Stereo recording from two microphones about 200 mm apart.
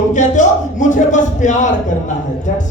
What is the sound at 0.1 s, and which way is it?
A man's voice, 40° left (ahead or behind).